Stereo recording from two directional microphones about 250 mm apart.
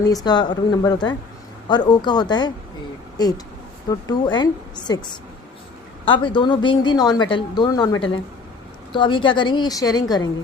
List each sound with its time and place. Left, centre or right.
0.0 s a woman's voice: centre